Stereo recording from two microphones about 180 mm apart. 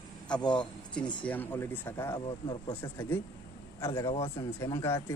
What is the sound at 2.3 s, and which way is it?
Speech, 25° left (ahead or behind).